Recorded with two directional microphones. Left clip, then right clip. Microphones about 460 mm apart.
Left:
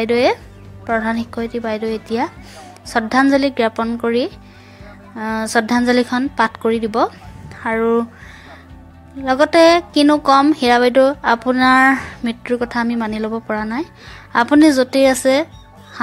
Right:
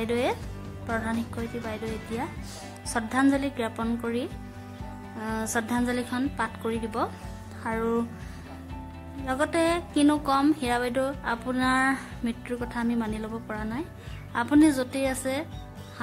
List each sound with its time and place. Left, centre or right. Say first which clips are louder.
0.0 s a woman's voice: left 12 dB; right
9.2 s speech: left 15 dB; right